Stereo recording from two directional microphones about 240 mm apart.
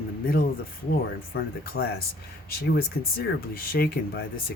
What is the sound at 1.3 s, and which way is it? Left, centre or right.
Speech, left.